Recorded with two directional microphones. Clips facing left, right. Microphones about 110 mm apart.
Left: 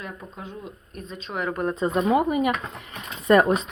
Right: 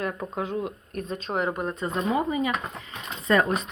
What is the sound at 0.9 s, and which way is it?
Speech, 55° right (ahead or behind).